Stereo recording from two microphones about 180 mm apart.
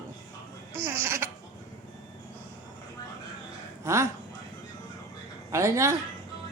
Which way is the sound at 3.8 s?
15° right (ahead or behind).